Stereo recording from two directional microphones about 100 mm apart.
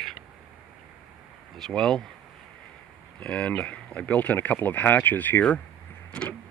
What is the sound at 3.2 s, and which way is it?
Speech, 10° left (ahead or behind).